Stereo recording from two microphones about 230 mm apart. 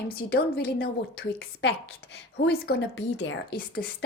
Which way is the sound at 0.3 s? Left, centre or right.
Left.